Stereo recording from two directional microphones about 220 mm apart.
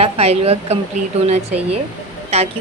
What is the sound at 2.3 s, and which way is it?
Speech, 30° right (ahead or behind).